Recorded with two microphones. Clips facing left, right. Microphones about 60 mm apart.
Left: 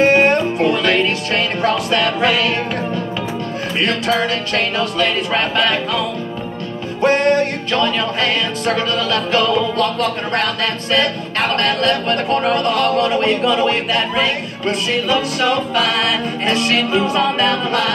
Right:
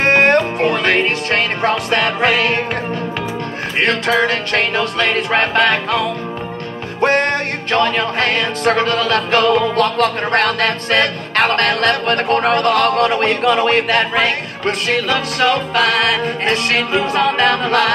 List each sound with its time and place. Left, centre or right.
0.0 s music: right
0.6 s music: right
3.7 s music: right